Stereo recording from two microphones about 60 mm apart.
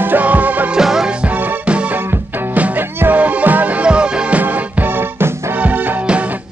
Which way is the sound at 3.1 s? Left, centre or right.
Right.